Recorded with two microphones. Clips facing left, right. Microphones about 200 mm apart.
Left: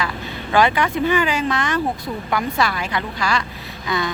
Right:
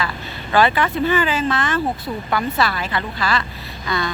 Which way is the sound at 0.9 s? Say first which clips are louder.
Even; 15° left (ahead or behind).